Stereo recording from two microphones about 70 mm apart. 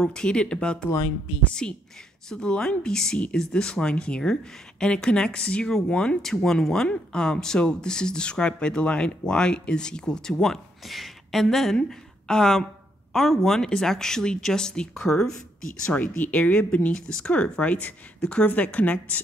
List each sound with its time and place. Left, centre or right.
0.0 s a woman's voice: centre
15.9 s speech: left